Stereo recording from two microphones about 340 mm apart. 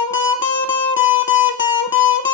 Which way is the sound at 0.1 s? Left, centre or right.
Left.